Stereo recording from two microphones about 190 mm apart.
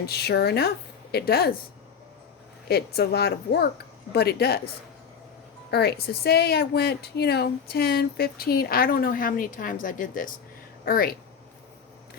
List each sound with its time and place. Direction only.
0.0 s a woman's voice: 60° left (ahead or behind)
2.6 s a woman's voice: 55° left (ahead or behind)
5.7 s speech: 55° left (ahead or behind)